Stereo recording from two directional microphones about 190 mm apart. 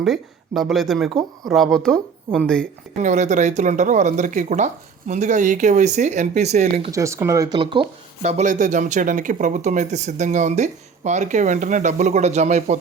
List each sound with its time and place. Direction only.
0.0 s speech: centre (ahead or behind)
3.0 s speech: 40° right (ahead or behind)
6.9 s speech: 15° right (ahead or behind); by 12.7 s 40° right (ahead or behind)